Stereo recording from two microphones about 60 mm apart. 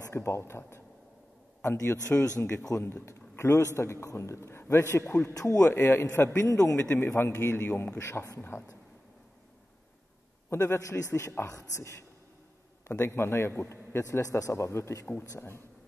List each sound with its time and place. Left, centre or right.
0.1 s a man's voice: left
5.3 s a man's voice: left
5.6 s a man's voice: left
6.5 s a man's voice: left
6.8 s a man's voice: left
8.1 s a man's voice: left
10.5 s a man's voice: left
12.8 s a man's voice: left
14.3 s a man's voice: left